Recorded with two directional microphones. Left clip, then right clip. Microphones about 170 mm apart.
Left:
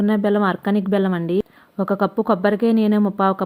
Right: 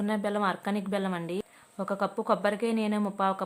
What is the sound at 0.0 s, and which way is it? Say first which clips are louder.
A woman's voice: left 10 dB; 30° left (ahead or behind).